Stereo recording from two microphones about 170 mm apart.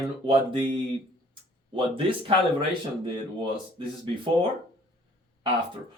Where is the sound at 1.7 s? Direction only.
30° right (ahead or behind).